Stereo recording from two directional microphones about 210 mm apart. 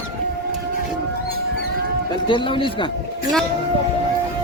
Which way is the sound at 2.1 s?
25° left (ahead or behind).